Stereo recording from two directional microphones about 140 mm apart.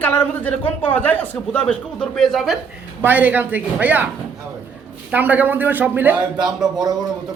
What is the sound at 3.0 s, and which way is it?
Speech, 15° right (ahead or behind).